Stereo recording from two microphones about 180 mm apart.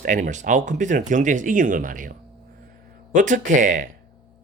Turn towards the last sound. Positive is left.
turn(degrees=-45)  # may be behind; listen again after turning